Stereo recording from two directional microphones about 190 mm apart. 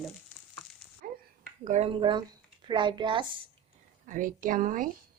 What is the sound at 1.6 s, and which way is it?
Speech, 35° right (ahead or behind).